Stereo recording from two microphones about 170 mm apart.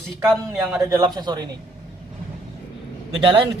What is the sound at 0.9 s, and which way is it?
Speech, 25° right (ahead or behind).